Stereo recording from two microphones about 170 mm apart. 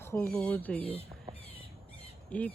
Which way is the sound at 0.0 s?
15° left (ahead or behind).